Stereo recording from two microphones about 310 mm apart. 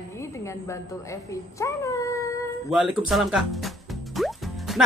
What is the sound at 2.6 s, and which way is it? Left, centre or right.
Speech, centre.